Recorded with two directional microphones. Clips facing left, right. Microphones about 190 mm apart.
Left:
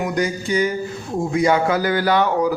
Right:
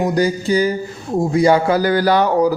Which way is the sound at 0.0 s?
35° right (ahead or behind).